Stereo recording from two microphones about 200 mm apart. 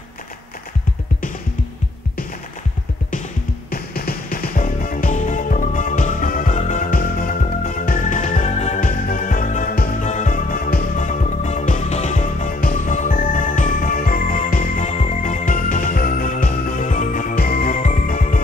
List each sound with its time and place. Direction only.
3.7 s music: 50° left (ahead or behind)